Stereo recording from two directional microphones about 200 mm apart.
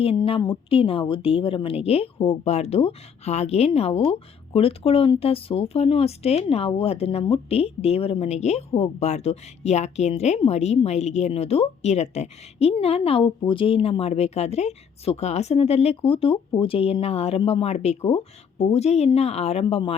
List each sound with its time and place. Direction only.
0.0 s a woman's voice: 30° left (ahead or behind)